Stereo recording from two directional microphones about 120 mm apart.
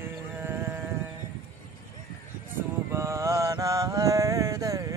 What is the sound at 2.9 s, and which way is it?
Mantra, 25° right (ahead or behind).